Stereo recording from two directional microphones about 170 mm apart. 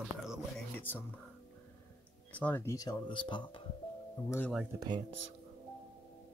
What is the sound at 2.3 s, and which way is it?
Speech, 10° left (ahead or behind).